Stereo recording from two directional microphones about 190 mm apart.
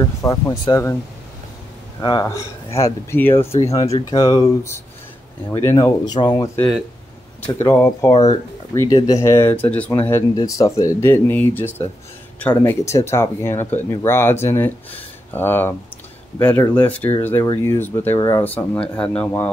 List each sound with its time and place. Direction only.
0.0 s speech: 15° left (ahead or behind)
2.0 s speech: 20° left (ahead or behind)
2.8 s speech: 10° left (ahead or behind)
7.6 s speech: 15° left (ahead or behind)